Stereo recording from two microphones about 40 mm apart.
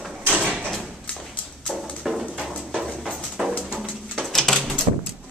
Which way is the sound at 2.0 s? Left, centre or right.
Centre.